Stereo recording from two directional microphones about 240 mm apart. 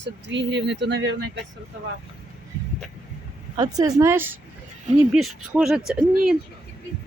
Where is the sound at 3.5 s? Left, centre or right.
Centre.